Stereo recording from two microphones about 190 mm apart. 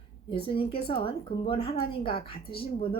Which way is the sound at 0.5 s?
30° left (ahead or behind).